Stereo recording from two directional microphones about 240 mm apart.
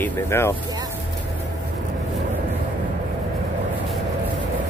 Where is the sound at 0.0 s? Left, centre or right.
Centre.